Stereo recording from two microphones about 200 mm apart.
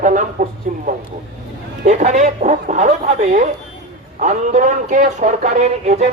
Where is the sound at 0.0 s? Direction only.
40° right (ahead or behind).